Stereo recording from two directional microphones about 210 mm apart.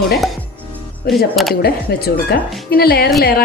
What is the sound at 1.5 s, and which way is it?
A woman's voice, 50° left (ahead or behind).